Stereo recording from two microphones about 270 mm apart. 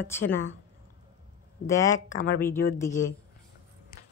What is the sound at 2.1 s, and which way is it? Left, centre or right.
Speech, left.